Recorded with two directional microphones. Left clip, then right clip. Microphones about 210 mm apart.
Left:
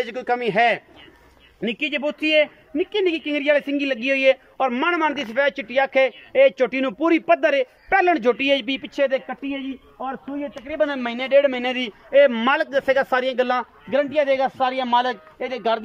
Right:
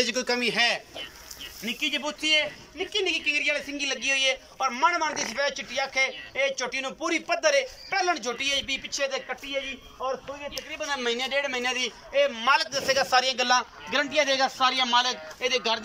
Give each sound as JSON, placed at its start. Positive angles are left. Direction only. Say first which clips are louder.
{"t": 0.0, "sound": "speech", "louder": "left 3 dB", "side_deg": 40}
{"t": 10.7, "sound": "speech", "louder": "left 6 dB", "side_deg": 50}